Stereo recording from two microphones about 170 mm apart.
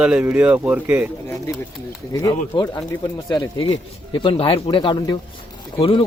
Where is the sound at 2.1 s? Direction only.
20° left (ahead or behind).